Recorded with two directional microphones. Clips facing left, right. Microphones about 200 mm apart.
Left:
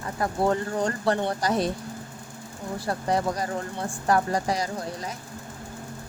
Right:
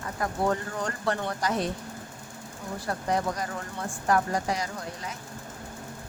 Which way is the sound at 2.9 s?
30° left (ahead or behind).